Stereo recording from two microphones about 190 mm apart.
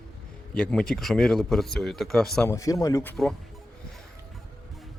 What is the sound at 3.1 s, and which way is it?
Speech, centre (ahead or behind).